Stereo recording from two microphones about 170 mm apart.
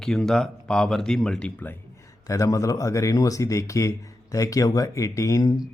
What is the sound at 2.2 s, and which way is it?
Speech, 20° left (ahead or behind).